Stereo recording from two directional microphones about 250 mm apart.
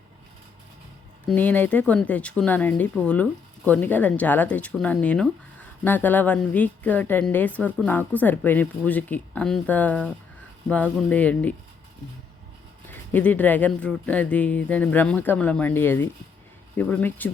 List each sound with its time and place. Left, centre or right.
1.3 s speech: centre
12.9 s speech: centre